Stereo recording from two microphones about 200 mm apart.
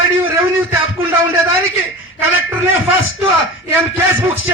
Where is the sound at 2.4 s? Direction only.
75° left (ahead or behind).